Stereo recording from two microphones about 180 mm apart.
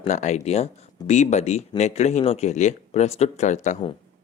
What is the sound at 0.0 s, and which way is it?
Speech, 40° left (ahead or behind).